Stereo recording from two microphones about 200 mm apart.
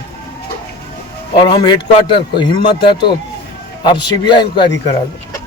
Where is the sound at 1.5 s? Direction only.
20° left (ahead or behind).